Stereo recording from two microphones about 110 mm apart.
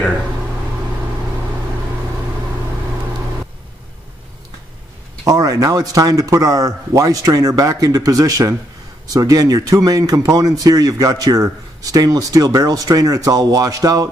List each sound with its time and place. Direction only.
5.2 s speech: 30° right (ahead or behind)